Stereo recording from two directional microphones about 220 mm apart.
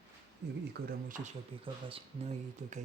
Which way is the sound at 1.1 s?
35° right (ahead or behind).